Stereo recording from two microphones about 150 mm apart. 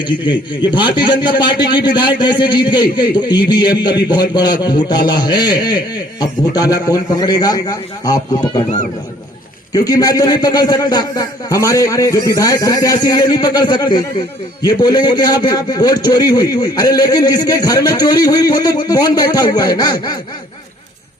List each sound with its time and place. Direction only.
0.0 s a man's voice: 30° left (ahead or behind)
9.7 s a man's voice: 25° left (ahead or behind)